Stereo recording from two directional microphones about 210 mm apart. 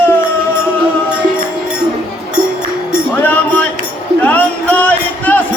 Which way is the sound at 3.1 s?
10° left (ahead or behind).